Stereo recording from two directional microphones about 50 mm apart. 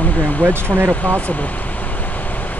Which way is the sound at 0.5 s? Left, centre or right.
Right.